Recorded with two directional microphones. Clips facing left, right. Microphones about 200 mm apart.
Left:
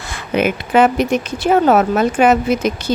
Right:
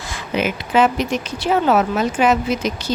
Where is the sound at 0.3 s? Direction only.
55° left (ahead or behind).